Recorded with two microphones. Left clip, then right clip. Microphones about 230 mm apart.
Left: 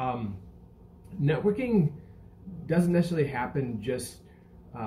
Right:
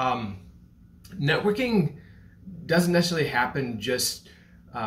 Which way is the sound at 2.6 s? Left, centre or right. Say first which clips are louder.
Right 5 dB; centre.